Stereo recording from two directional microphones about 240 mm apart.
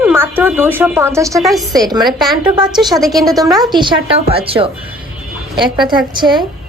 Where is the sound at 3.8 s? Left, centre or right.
Right.